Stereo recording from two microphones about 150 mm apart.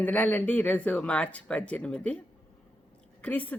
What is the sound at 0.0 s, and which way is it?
Speech, 10° left (ahead or behind).